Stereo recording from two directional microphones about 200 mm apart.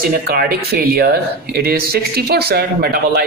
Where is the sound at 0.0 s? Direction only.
45° right (ahead or behind).